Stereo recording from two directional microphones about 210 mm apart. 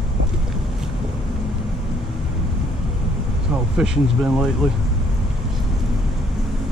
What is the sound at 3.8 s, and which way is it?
Speech, 5° right (ahead or behind).